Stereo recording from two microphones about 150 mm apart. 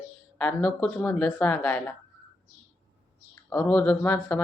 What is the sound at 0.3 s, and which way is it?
Speech, 10° left (ahead or behind).